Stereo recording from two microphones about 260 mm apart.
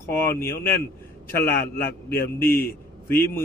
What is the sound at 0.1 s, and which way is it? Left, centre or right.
A man's voice, centre.